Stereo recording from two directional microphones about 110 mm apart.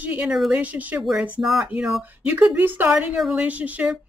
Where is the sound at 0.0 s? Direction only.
15° right (ahead or behind).